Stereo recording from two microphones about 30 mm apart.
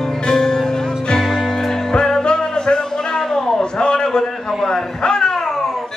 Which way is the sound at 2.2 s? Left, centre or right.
Left.